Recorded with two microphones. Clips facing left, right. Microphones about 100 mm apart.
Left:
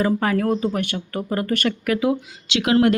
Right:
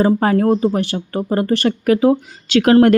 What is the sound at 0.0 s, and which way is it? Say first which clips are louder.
A woman's voice: right 6 dB; 35° right (ahead or behind).